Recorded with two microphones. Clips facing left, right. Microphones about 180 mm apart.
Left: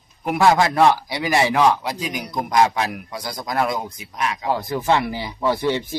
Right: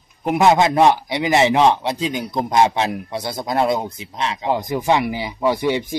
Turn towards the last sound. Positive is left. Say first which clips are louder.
# right 2 dB
turn(degrees=-15)  # may be behind; listen again after turning